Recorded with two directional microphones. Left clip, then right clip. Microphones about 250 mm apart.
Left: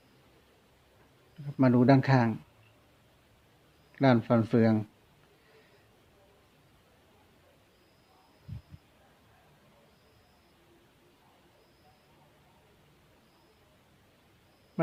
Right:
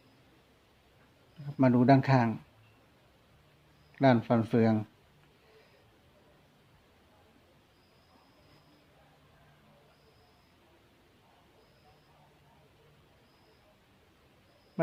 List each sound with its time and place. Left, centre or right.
1.5 s speech: centre
3.9 s speech: centre